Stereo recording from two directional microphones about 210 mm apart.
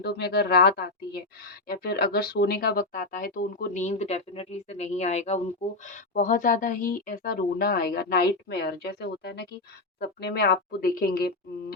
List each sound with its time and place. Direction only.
0.0 s a woman's voice: 50° left (ahead or behind)